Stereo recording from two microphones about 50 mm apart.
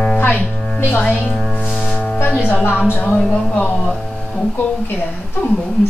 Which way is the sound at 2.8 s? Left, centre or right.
Left.